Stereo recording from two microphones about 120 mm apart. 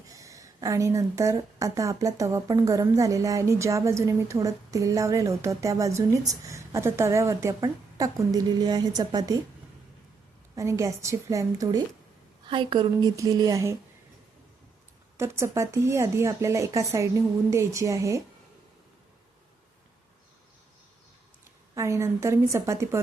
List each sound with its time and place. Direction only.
0.1 s a woman's voice: 25° right (ahead or behind)
10.5 s a woman's voice: 25° right (ahead or behind)
12.5 s a woman's voice: 45° right (ahead or behind); by 13.7 s 25° right (ahead or behind)
15.2 s a woman's voice: 25° right (ahead or behind)
21.8 s a woman's voice: 25° right (ahead or behind)